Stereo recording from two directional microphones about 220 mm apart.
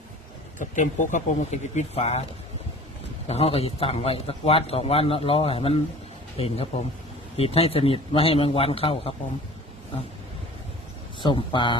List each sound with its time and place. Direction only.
0.6 s speech: 35° left (ahead or behind)
3.2 s a man's voice: 25° left (ahead or behind)
11.2 s a man's voice: 20° left (ahead or behind)